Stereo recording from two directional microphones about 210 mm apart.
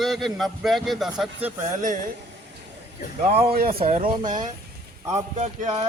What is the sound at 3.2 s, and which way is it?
Speech, 30° right (ahead or behind).